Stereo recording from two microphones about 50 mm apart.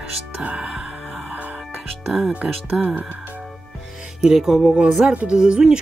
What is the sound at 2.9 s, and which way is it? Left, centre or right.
Speech, right.